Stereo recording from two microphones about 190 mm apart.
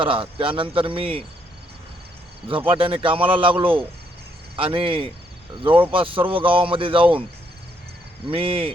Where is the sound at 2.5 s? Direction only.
25° right (ahead or behind).